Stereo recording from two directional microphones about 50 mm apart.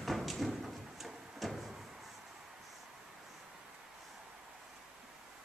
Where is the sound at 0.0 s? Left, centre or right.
Centre.